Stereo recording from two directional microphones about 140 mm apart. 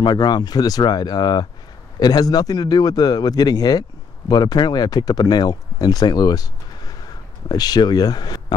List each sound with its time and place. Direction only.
0.0 s speech: 30° left (ahead or behind)